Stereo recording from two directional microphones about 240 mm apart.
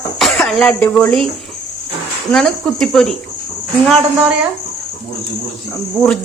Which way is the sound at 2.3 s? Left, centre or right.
Centre.